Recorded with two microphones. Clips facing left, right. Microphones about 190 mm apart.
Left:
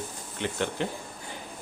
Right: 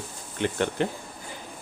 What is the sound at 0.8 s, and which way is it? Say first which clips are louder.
Speech: right 5 dB; 55° right (ahead or behind).